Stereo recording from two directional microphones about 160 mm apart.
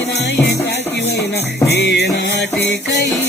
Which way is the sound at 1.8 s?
90° left.